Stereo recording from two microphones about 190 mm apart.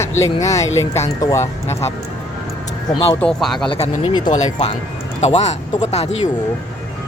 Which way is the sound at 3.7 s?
30° left (ahead or behind).